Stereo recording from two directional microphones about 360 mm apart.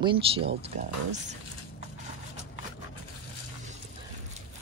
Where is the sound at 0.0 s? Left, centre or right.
Centre.